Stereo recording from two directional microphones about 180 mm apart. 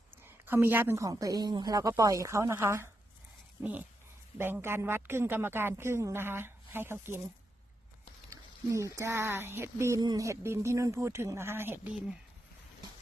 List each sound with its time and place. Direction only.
0.3 s speech: 10° right (ahead or behind)
8.3 s speech: 15° right (ahead or behind)